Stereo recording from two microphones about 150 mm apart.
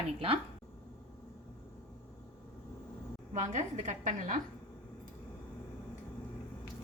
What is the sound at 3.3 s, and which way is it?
A woman's voice, 55° right (ahead or behind).